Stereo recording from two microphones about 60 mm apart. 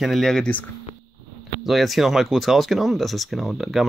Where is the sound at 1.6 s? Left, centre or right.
Centre.